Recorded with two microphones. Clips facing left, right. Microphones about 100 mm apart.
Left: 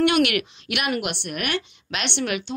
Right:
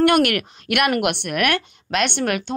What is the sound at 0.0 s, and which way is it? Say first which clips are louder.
Speech: right 3 dB; 45° right (ahead or behind).